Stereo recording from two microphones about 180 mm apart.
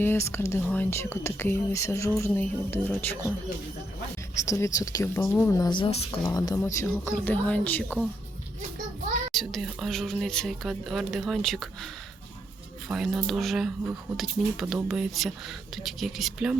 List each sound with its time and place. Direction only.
0.0 s speech: 15° left (ahead or behind)
4.4 s speech: 15° left (ahead or behind); by 6.1 s 35° left (ahead or behind)
6.2 s speech: 20° left (ahead or behind)
9.3 s speech: centre (ahead or behind)
12.9 s speech: centre (ahead or behind)